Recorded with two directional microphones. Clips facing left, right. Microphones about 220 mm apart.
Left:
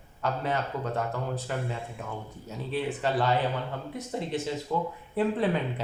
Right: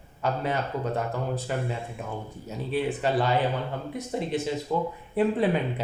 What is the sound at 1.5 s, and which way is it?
Speech, 10° right (ahead or behind).